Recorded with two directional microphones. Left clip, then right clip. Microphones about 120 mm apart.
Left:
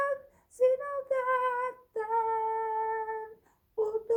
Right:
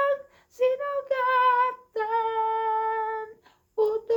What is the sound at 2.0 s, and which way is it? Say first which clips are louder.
Humming: right 4 dB; 10° right (ahead or behind).